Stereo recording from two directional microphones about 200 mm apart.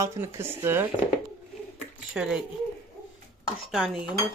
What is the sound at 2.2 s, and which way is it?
Cutlery, 5° right (ahead or behind).